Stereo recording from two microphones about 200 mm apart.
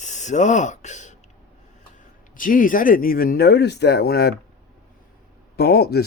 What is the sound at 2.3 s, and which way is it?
Speech, 45° left (ahead or behind).